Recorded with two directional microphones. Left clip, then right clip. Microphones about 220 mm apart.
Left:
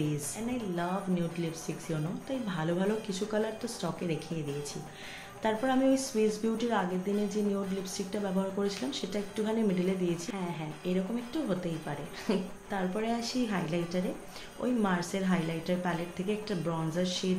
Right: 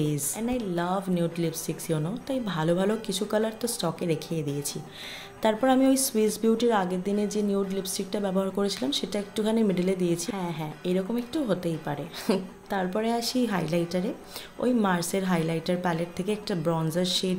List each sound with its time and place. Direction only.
0.1 s speech: 50° right (ahead or behind)
5.4 s speech: 50° right (ahead or behind)